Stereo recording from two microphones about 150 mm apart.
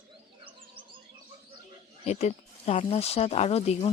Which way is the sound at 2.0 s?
45° left (ahead or behind).